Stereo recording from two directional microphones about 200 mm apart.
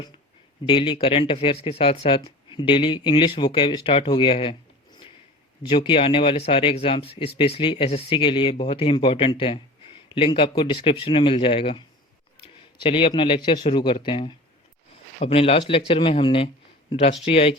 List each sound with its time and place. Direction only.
0.6 s speech: 25° left (ahead or behind)
5.6 s a man's voice: 25° left (ahead or behind)